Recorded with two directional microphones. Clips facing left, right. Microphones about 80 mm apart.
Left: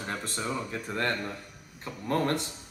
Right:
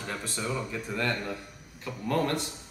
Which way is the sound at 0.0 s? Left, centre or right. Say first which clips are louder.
Left 1 dB; left.